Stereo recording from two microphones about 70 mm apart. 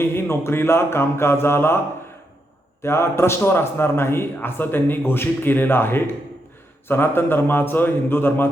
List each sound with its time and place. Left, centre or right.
0.0 s a man's voice: left
2.8 s a man's voice: left